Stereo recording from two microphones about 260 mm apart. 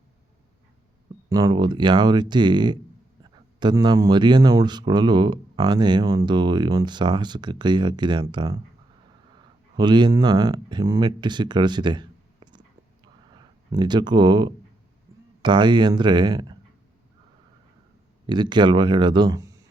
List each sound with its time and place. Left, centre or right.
1.3 s speech: centre
9.7 s speech: centre
18.3 s speech: centre